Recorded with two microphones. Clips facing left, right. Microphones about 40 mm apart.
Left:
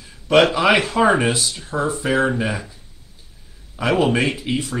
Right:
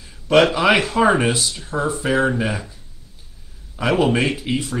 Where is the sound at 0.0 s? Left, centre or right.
Centre.